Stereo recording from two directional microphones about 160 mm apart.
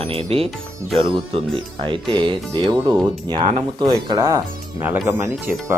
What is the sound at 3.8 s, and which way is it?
Speech, 25° right (ahead or behind).